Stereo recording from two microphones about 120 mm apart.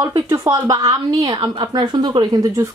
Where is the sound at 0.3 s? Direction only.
30° right (ahead or behind).